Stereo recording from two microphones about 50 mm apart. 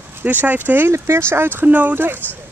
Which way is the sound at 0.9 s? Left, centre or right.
Right.